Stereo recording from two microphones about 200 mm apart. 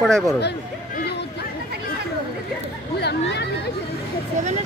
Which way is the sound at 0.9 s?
55° left (ahead or behind).